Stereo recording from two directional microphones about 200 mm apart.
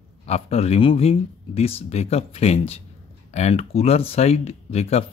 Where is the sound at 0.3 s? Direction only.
30° left (ahead or behind).